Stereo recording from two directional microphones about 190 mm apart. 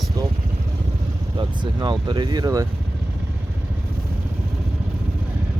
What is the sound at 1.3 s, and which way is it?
Speech, 25° right (ahead or behind).